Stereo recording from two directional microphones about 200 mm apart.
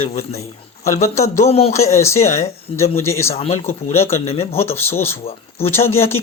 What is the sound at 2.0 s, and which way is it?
Speech, 15° left (ahead or behind).